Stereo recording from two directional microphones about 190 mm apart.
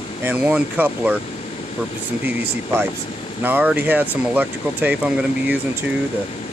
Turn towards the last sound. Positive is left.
turn(degrees=-5)  # may be behind; listen again after turning